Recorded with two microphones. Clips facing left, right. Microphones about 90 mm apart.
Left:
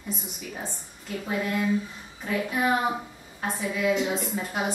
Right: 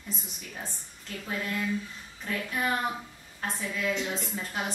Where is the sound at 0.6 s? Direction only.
10° left (ahead or behind).